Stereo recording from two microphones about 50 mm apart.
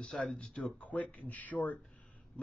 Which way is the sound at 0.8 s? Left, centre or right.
Left.